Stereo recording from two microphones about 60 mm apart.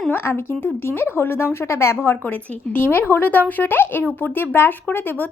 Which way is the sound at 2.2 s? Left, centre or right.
Left.